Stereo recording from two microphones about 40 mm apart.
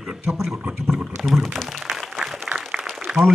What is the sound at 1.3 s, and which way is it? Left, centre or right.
Speech, centre.